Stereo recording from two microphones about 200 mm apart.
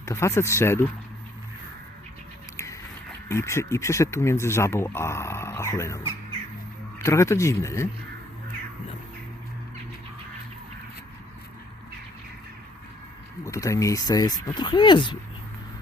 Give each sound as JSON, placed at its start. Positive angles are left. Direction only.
{"t": 0.0, "sound": "speech", "side_deg": 15}
{"t": 3.2, "sound": "speech", "side_deg": 15}
{"t": 13.4, "sound": "speech", "side_deg": 15}